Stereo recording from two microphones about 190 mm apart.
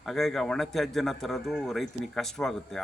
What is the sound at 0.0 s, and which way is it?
Speech, centre (ahead or behind).